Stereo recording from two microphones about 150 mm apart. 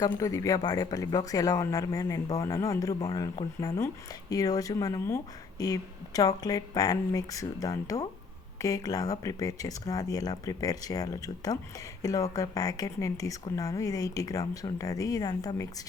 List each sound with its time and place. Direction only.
0.0 s speech: 20° left (ahead or behind)